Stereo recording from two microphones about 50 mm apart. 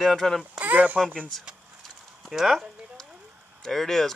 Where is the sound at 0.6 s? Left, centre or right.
Right.